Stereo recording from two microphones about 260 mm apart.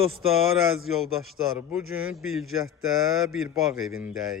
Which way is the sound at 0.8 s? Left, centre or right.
Centre.